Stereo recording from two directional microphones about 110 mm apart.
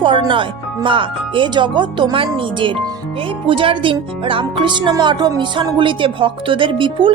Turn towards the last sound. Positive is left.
turn(degrees=-50)  # may be behind; listen again after turning